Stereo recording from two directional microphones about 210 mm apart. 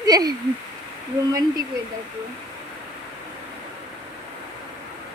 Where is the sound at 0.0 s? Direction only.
20° right (ahead or behind).